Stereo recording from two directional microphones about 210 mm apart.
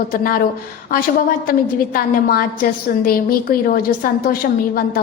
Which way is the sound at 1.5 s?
45° left (ahead or behind).